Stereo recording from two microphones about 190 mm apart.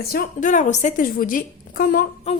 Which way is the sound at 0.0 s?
50° left (ahead or behind).